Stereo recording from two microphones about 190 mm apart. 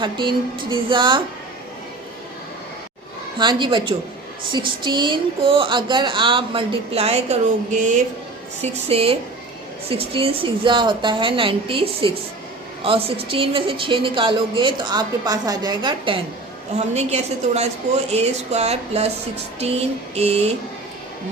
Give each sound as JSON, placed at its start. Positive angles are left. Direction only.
{"t": 0.0, "sound": "a woman's voice", "side_deg": -25}
{"t": 3.3, "sound": "a woman's voice", "side_deg": -25}
{"t": 8.6, "sound": "a woman's voice", "side_deg": -30}
{"t": 16.7, "sound": "a woman's voice", "side_deg": -35}